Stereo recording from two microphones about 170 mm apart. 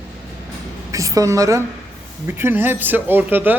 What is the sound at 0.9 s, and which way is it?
A woman's voice, 20° right (ahead or behind).